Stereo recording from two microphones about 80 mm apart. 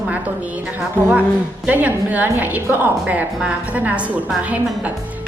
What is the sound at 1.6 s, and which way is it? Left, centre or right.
A woman's voice, centre.